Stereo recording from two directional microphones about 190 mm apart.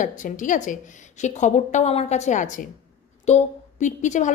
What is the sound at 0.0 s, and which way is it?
A woman's voice, 40° left (ahead or behind).